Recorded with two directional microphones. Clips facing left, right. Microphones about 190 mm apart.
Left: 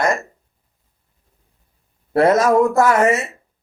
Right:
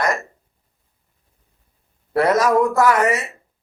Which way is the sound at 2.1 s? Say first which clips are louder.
Left 3 dB; 25° left (ahead or behind).